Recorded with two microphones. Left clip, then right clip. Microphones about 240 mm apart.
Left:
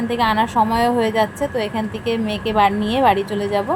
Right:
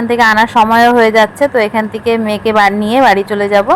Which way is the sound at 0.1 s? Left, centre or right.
Right.